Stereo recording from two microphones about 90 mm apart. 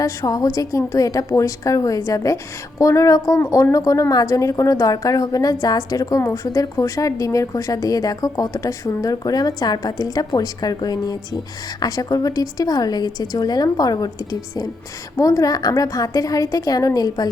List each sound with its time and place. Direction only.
0.0 s a woman's voice: 40° left (ahead or behind)